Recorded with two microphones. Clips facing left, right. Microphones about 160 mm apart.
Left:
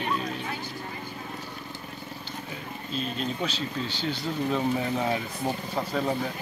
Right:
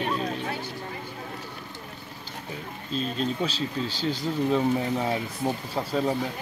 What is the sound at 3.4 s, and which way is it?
Speech, 35° right (ahead or behind).